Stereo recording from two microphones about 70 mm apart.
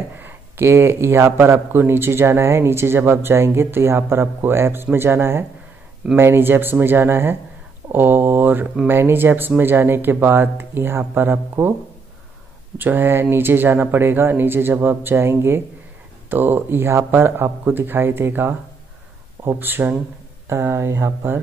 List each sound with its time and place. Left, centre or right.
0.2 s speech: right
12.7 s speech: right